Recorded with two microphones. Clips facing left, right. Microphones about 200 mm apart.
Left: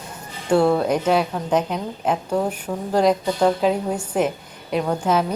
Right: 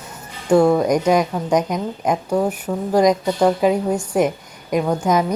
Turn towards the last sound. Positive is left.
turn(degrees=-10)  # may be behind; listen again after turning